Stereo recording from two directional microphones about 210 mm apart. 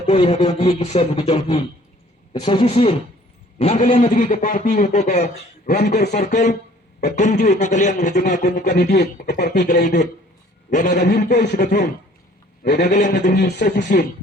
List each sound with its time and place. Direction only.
0.1 s a man's voice: 30° left (ahead or behind)
5.6 s speech: 50° left (ahead or behind)
5.9 s a man's voice: 35° left (ahead or behind)
8.6 s speech: 50° left (ahead or behind)
9.6 s a man's voice: 35° left (ahead or behind)
10.9 s speech: 55° left (ahead or behind)
12.6 s speech: 50° left (ahead or behind)
12.9 s a man's voice: 35° left (ahead or behind)
13.3 s speech: 50° left (ahead or behind)